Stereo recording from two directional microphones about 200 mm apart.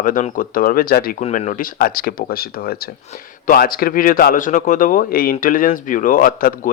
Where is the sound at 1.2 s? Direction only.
35° left (ahead or behind).